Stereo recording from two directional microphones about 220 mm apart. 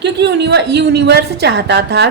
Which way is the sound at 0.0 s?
50° right (ahead or behind).